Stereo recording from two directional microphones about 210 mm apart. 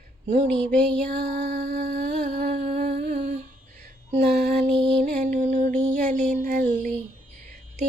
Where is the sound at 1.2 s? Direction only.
50° right (ahead or behind).